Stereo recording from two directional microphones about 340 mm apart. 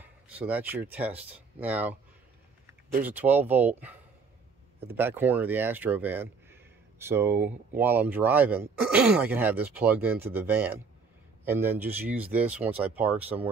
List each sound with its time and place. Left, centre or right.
0.0 s a sound: centre
0.9 s speech: centre
3.0 s speech: centre